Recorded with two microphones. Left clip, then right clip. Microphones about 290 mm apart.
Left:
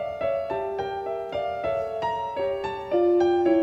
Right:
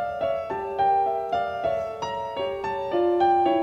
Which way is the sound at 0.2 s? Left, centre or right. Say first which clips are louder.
Even; centre.